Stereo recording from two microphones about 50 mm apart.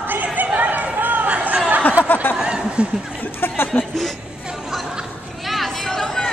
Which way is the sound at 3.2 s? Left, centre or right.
Left.